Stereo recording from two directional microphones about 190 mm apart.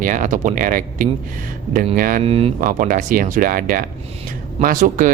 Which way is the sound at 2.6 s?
45° right (ahead or behind).